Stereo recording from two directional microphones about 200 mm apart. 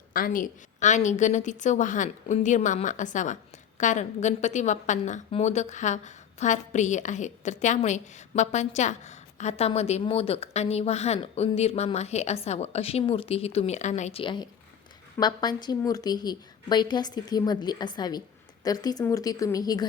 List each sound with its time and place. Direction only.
0.1 s a woman's voice: 45° left (ahead or behind); by 19.9 s 20° left (ahead or behind)